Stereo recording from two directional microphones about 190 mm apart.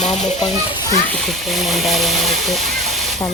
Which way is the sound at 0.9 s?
5° left (ahead or behind).